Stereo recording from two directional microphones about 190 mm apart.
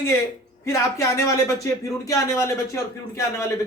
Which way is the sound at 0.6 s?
15° left (ahead or behind).